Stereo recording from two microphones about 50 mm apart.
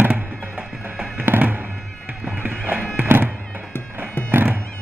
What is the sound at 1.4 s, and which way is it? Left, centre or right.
Music, right.